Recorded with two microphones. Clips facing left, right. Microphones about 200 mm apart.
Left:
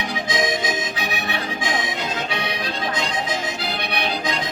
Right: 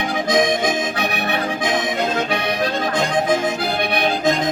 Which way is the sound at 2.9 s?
55° right (ahead or behind).